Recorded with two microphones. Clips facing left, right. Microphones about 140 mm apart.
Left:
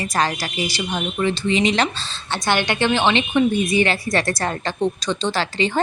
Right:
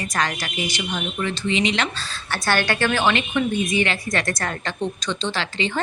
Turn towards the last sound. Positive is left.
turn(degrees=40)  # may be behind; listen again after turning